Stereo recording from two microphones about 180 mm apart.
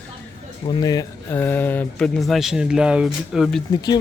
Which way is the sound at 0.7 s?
20° left (ahead or behind).